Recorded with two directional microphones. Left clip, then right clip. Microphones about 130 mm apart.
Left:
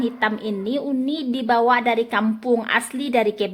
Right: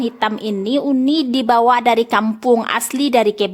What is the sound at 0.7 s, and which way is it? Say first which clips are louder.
Speech: right 9 dB; 45° right (ahead or behind).